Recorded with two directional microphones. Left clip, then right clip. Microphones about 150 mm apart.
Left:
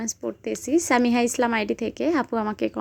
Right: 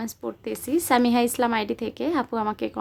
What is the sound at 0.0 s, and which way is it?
A woman's voice, 15° left (ahead or behind).